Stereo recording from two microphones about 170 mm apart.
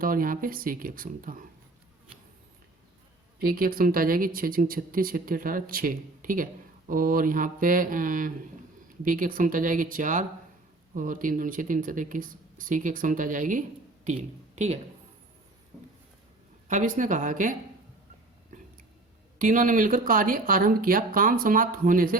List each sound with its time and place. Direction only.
0.0 s speech: 55° right (ahead or behind)
3.3 s speech: 60° right (ahead or behind); by 14.8 s 45° right (ahead or behind)
16.6 s speech: 50° right (ahead or behind)
19.4 s speech: 50° right (ahead or behind)